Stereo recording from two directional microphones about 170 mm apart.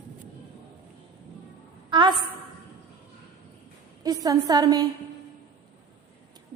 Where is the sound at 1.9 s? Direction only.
30° right (ahead or behind).